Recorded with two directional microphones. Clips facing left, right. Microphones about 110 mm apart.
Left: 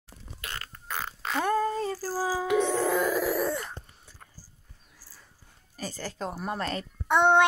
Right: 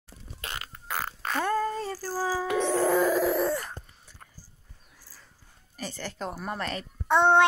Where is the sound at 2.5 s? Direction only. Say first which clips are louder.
Right 1 dB; centre (ahead or behind).